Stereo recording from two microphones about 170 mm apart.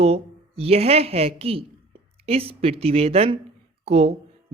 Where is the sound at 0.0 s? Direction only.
35° right (ahead or behind).